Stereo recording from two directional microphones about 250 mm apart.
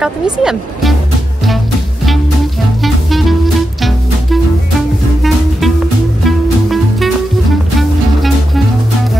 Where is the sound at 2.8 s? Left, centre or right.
Centre.